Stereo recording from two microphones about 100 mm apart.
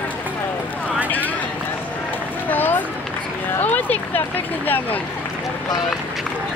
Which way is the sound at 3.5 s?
20° left (ahead or behind).